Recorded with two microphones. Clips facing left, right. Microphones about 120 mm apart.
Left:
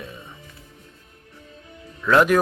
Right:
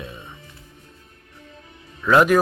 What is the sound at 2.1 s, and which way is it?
Speech, 5° right (ahead or behind).